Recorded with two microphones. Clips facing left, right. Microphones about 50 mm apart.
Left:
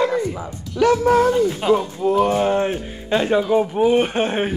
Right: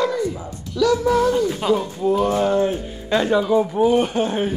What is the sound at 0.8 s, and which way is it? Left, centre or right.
Speech, left.